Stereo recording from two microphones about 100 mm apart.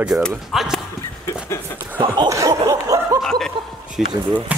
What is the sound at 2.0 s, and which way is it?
Snicker, 35° right (ahead or behind).